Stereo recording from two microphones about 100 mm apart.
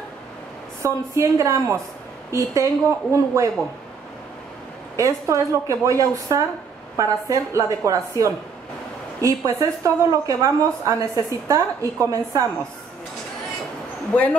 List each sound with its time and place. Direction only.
0.8 s a woman's voice: 30° right (ahead or behind)
4.9 s speech: 30° right (ahead or behind)
14.1 s speech: 15° left (ahead or behind)